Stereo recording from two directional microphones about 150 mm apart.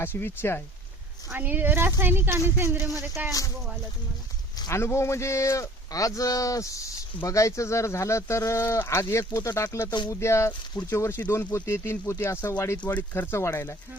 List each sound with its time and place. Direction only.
0.0 s speech: 15° left (ahead or behind)
1.3 s speech: 10° right (ahead or behind)
4.5 s a man's voice: 20° left (ahead or behind)